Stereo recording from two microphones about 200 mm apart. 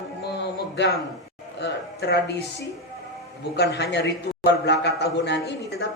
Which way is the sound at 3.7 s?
60° left (ahead or behind).